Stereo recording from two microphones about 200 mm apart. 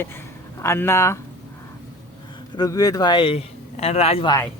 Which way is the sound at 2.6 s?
20° left (ahead or behind).